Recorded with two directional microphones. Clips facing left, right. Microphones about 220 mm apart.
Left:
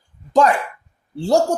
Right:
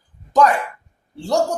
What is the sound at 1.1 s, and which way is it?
Speech, 30° left (ahead or behind).